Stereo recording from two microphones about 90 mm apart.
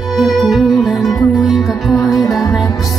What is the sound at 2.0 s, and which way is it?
Music, 40° left (ahead or behind).